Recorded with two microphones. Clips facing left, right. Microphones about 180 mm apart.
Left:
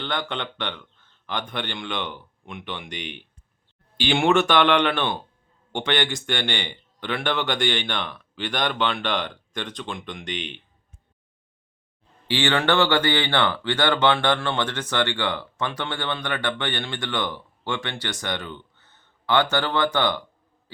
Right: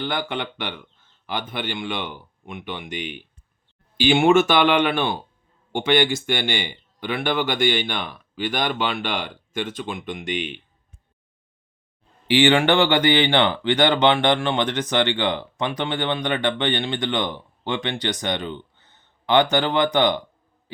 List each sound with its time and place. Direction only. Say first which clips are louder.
0.0 s speech: right 3 dB; 10° right (ahead or behind)
12.3 s speech: right 5 dB; 15° right (ahead or behind)